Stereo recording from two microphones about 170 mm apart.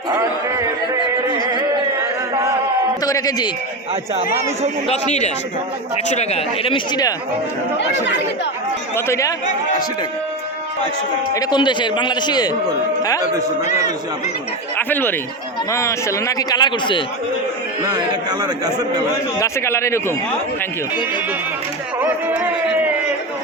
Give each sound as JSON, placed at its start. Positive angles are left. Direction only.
{"t": 3.0, "sound": "a man's voice", "side_deg": 20}
{"t": 4.9, "sound": "speech", "side_deg": 40}
{"t": 9.0, "sound": "a man's voice", "side_deg": 15}
{"t": 11.3, "sound": "a man's voice", "side_deg": 25}
{"t": 14.8, "sound": "a man's voice", "side_deg": 10}
{"t": 17.8, "sound": "a man's voice", "side_deg": -25}
{"t": 19.4, "sound": "a man's voice", "side_deg": 15}
{"t": 22.0, "sound": "speech", "side_deg": -10}